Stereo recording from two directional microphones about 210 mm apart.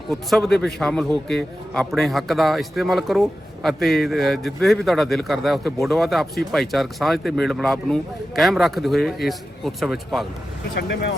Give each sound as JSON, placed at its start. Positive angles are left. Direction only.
{"t": 0.1, "sound": "a man's voice", "side_deg": 0}
{"t": 10.8, "sound": "speech", "side_deg": 50}